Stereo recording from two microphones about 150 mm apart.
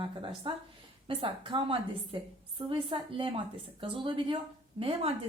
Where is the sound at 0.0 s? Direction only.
35° right (ahead or behind).